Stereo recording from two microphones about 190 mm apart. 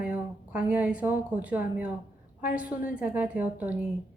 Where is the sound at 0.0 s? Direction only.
10° right (ahead or behind).